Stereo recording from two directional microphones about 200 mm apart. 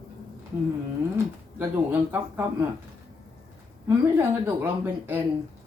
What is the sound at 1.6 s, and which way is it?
Speech, 10° right (ahead or behind).